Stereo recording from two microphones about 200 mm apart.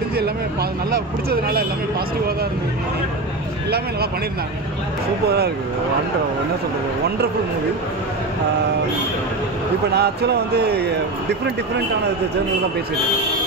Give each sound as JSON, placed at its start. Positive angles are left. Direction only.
{"t": 0.1, "sound": "speech", "side_deg": -50}
{"t": 9.9, "sound": "music", "side_deg": -55}